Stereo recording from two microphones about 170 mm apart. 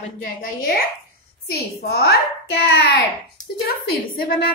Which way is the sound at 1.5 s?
70° left (ahead or behind).